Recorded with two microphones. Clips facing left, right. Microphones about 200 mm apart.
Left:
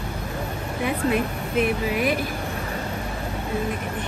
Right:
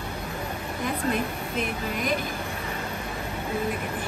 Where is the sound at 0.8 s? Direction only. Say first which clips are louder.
Left 4 dB; 5° left (ahead or behind).